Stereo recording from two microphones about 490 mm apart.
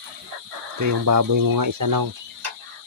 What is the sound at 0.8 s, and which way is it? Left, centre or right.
Speech, right.